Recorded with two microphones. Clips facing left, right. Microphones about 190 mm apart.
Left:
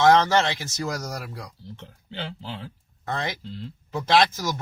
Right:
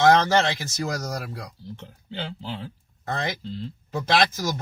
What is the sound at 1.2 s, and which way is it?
Speech, 60° right (ahead or behind).